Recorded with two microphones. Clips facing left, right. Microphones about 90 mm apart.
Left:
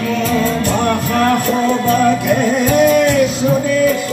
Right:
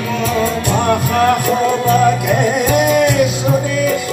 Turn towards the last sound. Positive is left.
turn(degrees=-15)  # may be behind; listen again after turning